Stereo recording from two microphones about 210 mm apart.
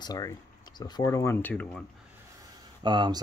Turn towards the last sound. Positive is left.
turn(degrees=-20)  # may be behind; listen again after turning